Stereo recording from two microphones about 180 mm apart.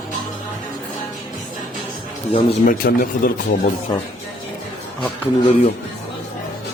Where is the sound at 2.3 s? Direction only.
30° left (ahead or behind).